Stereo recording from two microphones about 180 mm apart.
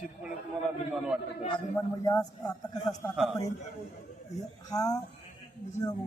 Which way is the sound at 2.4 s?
20° left (ahead or behind).